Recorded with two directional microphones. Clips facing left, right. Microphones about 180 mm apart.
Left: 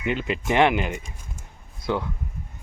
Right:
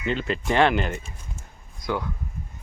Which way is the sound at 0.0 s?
15° left (ahead or behind).